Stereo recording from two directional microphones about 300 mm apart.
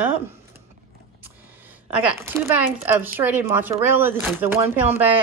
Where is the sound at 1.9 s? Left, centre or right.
Centre.